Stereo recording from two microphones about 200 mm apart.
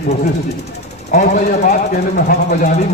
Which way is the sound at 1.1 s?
40° left (ahead or behind).